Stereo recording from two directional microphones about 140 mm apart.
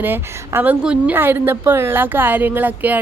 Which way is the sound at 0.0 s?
15° right (ahead or behind).